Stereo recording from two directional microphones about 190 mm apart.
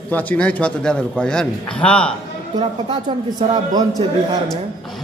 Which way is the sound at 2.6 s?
30° right (ahead or behind).